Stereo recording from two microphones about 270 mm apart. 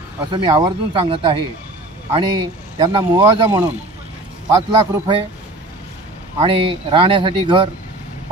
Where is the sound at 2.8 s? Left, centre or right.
Centre.